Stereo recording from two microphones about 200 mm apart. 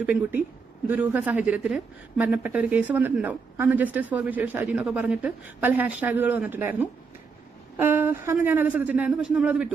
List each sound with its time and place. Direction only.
0.0 s speech: 10° right (ahead or behind)